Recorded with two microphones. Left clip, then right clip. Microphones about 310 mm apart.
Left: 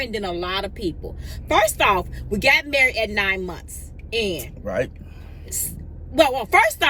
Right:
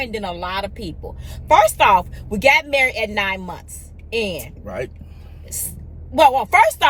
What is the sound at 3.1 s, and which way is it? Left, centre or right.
Speech, centre.